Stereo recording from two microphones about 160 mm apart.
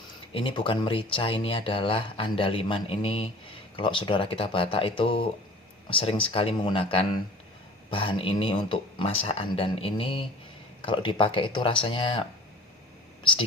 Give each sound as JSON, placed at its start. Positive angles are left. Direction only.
{"t": 0.3, "sound": "speech", "side_deg": 35}